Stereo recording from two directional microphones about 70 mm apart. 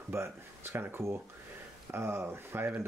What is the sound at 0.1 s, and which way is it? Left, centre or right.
Speech, right.